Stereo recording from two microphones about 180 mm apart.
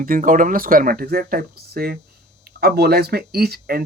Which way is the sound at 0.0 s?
50° right (ahead or behind).